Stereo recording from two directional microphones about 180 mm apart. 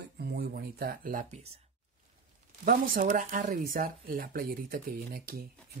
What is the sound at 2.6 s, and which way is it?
Speech, 50° right (ahead or behind).